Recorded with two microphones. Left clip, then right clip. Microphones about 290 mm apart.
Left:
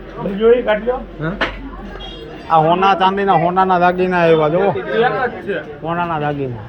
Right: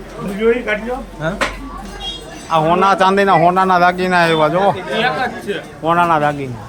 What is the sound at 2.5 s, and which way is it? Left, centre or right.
A man's voice, centre.